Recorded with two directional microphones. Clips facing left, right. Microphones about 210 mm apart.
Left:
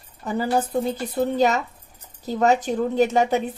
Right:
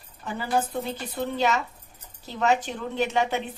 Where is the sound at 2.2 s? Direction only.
40° left (ahead or behind).